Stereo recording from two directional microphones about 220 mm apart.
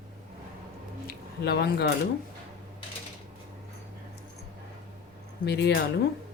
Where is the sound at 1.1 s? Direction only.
45° left (ahead or behind).